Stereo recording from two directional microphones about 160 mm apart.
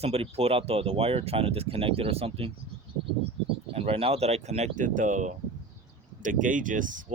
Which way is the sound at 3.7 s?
40° right (ahead or behind).